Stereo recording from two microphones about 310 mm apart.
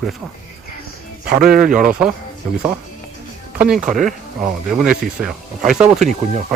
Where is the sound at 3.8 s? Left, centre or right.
Right.